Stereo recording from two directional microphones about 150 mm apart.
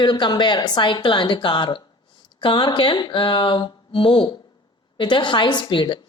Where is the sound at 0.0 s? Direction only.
30° left (ahead or behind).